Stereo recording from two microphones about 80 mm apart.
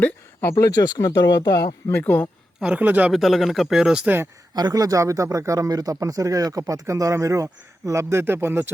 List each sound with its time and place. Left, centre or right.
0.5 s speech: left
1.9 s speech: left
2.6 s speech: centre
3.1 s speech: centre
4.0 s speech: right
4.5 s speech: right